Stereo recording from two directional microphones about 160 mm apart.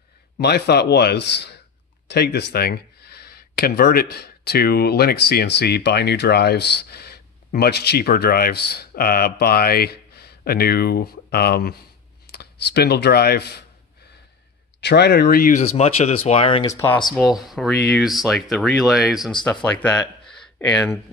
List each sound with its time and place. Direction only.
0.4 s speech: 90° left
14.8 s speech: 90° left; by 15.6 s 60° left (ahead or behind)
15.6 s speech: 40° left (ahead or behind)
16.6 s speech: 20° left (ahead or behind)
17.1 s speech: centre (ahead or behind)
19.4 s speech: 10° left (ahead or behind)